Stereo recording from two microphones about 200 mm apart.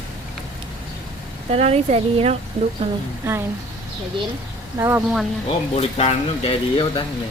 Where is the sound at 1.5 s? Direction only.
30° right (ahead or behind).